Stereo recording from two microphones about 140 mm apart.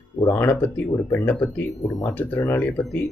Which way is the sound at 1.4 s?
25° left (ahead or behind).